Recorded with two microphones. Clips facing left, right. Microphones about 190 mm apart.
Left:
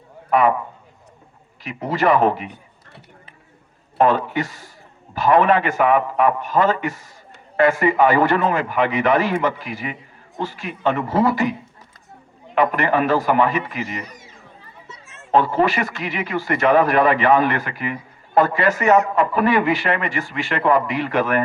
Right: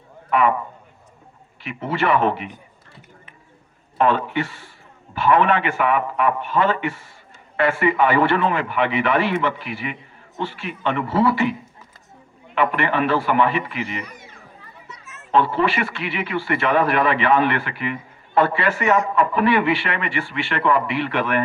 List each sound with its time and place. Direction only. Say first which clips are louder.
0.3 s speech: left 2 dB; 40° left (ahead or behind)
1.6 s speech: left 3 dB; 40° left (ahead or behind)
3.9 s speech: left 2 dB; 40° left (ahead or behind)
12.5 s speech: left 2 dB; 40° left (ahead or behind)
14.8 s a sound: right 1 dB; 25° left (ahead or behind)
15.3 s speech: left 2 dB; 40° left (ahead or behind)